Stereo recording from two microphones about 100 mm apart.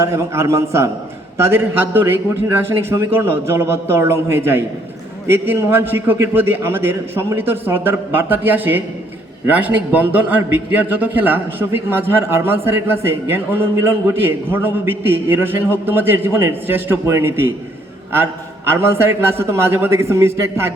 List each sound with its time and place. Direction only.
0.0 s a man's voice: 30° right (ahead or behind)